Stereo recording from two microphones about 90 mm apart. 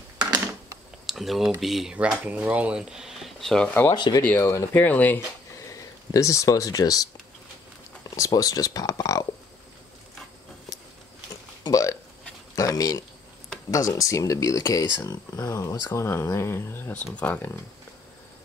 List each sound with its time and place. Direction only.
1.0 s speech: centre (ahead or behind)
2.0 s speech: 15° right (ahead or behind); by 3.6 s 5° left (ahead or behind)
3.9 s speech: 55° left (ahead or behind)
4.2 s speech: 15° left (ahead or behind)
5.7 s speech: 35° left (ahead or behind)
8.2 s speech: 40° left (ahead or behind)
11.6 s hiccup: 40° left (ahead or behind)
12.5 s a sound: 40° left (ahead or behind)
13.7 s speech: 40° left (ahead or behind)
15.9 s speech: 30° left (ahead or behind)
16.9 s speech: 15° left (ahead or behind)